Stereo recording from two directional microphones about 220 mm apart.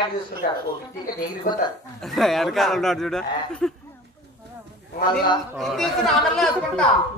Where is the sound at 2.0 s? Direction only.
Centre (ahead or behind).